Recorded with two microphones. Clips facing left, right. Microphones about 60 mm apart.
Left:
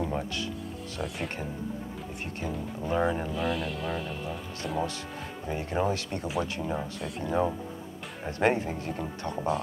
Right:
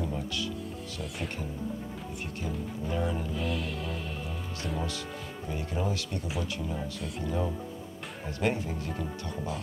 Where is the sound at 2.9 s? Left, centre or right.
Left.